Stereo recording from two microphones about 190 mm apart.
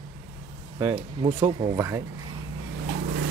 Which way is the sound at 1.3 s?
30° right (ahead or behind).